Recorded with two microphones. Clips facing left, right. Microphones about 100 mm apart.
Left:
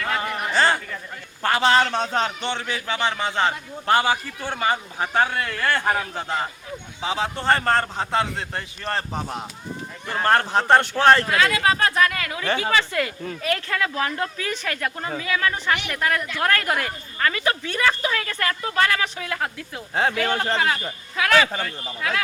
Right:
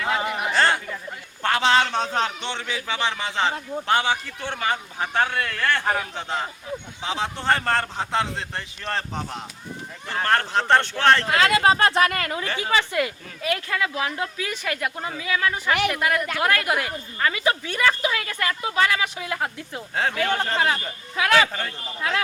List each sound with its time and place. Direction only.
0.0 s a sound: 15° right (ahead or behind)
0.5 s a sound: centre (ahead or behind)
1.4 s a man's voice: 5° left (ahead or behind)
11.3 s speech: 30° right (ahead or behind)
12.7 s a woman's voice: 20° right (ahead or behind)
20.3 s a man's voice: 15° left (ahead or behind)
21.2 s speech: 20° right (ahead or behind)